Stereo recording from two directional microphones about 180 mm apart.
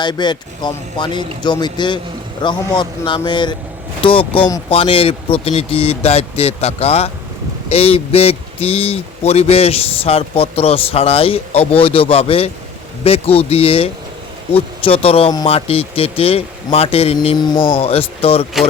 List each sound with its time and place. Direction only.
0.0 s speech: 25° left (ahead or behind)
17.7 s speech: 35° left (ahead or behind)